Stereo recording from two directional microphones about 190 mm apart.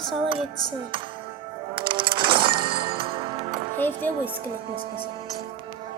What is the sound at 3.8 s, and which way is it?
Music, 10° left (ahead or behind).